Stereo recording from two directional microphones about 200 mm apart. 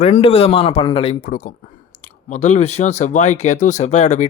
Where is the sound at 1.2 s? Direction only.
40° left (ahead or behind).